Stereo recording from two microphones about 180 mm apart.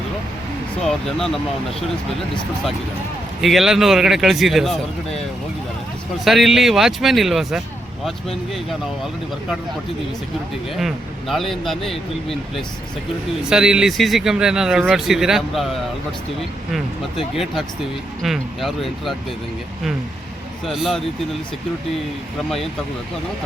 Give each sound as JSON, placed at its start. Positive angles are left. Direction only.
{"t": 0.9, "sound": "speech", "side_deg": 0}
{"t": 3.4, "sound": "speech", "side_deg": 0}
{"t": 6.2, "sound": "speech", "side_deg": 0}
{"t": 10.8, "sound": "speech", "side_deg": 0}
{"t": 17.3, "sound": "speech", "side_deg": 0}
{"t": 20.7, "sound": "speech", "side_deg": 0}
{"t": 22.4, "sound": "speech", "side_deg": 0}